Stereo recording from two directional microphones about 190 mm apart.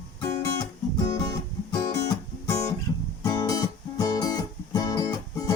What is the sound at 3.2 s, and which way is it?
Music, 20° left (ahead or behind).